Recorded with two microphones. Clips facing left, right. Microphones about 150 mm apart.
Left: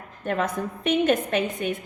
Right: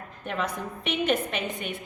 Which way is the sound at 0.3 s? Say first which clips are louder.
Left 5 dB; 45° left (ahead or behind).